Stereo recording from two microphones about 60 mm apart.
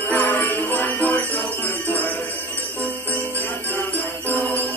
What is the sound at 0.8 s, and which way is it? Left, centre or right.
Music, left.